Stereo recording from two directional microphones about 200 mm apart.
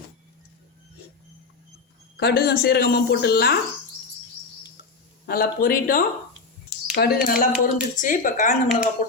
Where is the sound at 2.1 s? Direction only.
50° left (ahead or behind).